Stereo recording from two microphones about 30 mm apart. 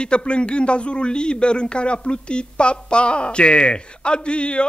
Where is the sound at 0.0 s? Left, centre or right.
Left.